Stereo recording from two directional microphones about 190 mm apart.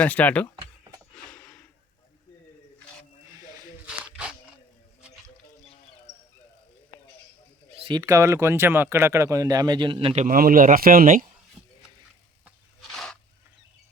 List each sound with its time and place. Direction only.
0.0 s speech: 10° left (ahead or behind)
1.1 s a sound: 5° left (ahead or behind)
3.8 s a sound: 5° right (ahead or behind)
7.9 s speech: 20° right (ahead or behind)
10.2 s speech: 50° right (ahead or behind)
12.5 s rub: centre (ahead or behind)